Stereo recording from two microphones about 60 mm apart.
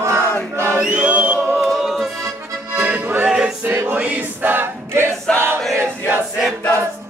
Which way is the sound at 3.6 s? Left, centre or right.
Right.